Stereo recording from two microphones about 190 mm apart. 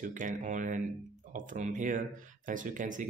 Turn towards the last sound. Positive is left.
turn(degrees=-45)  # may be behind; listen again after turning